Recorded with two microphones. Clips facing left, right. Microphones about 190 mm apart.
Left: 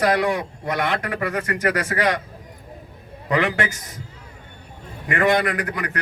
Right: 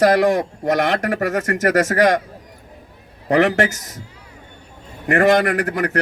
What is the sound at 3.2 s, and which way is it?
Speech, 45° right (ahead or behind).